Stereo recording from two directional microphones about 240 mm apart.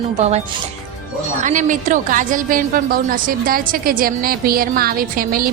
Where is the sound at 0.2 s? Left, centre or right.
Right.